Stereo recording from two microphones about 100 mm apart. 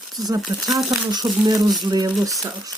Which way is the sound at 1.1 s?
45° right (ahead or behind).